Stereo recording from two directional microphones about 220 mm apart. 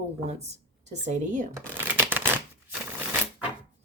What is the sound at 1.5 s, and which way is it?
Shuffling cards, 10° right (ahead or behind).